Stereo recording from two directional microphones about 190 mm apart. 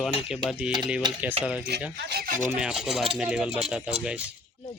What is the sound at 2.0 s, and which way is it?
Speech, 60° right (ahead or behind).